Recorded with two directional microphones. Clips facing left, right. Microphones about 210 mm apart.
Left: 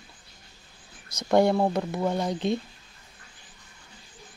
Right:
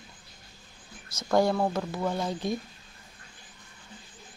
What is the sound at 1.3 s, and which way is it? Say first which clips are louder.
Speech: left 3 dB; 20° left (ahead or behind).